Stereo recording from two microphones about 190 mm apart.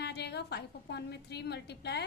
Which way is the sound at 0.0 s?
60° left (ahead or behind).